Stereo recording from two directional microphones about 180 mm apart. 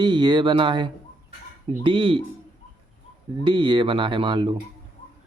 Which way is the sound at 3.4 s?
25° right (ahead or behind).